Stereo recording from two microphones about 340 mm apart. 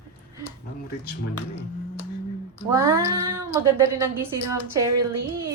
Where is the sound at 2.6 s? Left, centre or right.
Centre.